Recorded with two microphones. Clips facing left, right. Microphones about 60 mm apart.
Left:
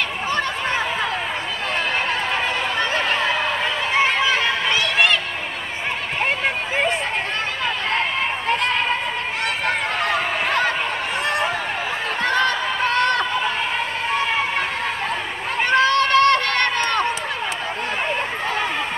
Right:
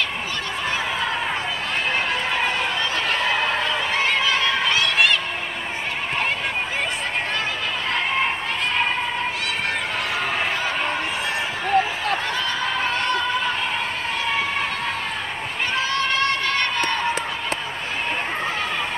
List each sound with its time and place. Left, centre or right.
3.9 s chatter: left
12.2 s a sound: left
15.7 s run: left